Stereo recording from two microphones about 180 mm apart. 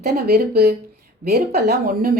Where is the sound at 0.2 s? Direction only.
60° right (ahead or behind).